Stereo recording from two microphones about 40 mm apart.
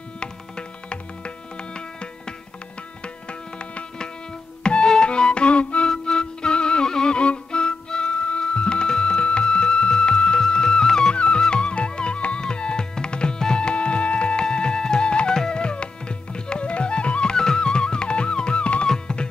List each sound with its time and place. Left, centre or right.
0.2 s music: left
3.3 s music: left